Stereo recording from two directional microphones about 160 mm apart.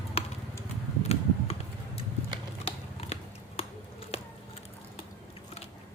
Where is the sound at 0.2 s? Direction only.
40° left (ahead or behind).